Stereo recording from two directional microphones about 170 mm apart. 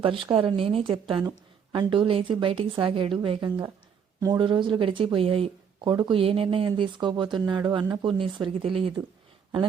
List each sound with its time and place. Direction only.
0.0 s a woman's voice: 30° right (ahead or behind)